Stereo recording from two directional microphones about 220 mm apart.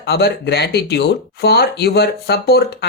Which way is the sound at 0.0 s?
50° left (ahead or behind).